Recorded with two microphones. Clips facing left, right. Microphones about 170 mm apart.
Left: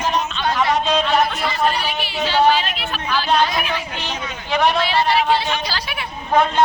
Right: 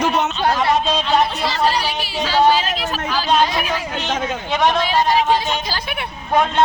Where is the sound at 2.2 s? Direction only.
40° right (ahead or behind).